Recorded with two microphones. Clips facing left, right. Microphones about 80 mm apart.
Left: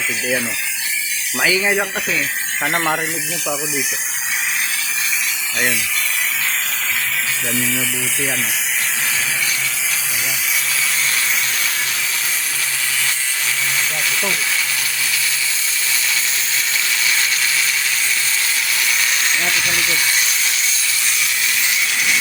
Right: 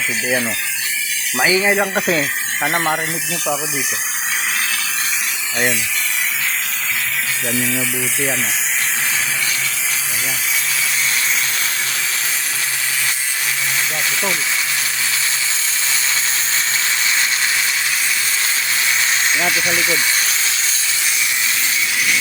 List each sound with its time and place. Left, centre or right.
1.5 s speech: centre
2.6 s speech: centre